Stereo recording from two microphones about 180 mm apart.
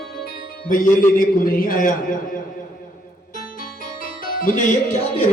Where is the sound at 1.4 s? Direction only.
50° left (ahead or behind).